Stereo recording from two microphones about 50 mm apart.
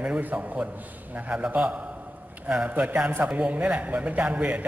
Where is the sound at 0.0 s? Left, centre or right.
Right.